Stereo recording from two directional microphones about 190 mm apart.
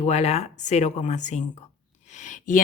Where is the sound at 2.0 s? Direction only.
40° left (ahead or behind).